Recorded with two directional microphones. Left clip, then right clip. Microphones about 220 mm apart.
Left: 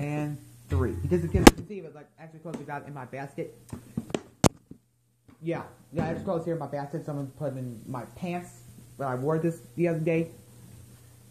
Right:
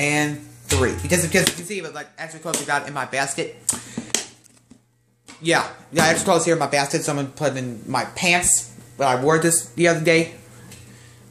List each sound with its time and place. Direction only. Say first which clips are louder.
0.0 s speech: right 13 dB; 35° right (ahead or behind)
5.4 s speech: right 14 dB; 45° right (ahead or behind)